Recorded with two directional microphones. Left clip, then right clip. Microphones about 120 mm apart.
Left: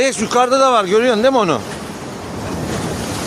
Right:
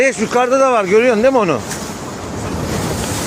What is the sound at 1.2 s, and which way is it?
Speech, 30° left (ahead or behind).